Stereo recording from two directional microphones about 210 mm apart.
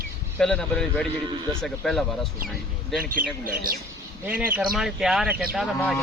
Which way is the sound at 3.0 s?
45° right (ahead or behind).